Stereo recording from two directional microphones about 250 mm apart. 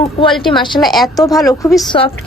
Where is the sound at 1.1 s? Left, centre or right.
Centre.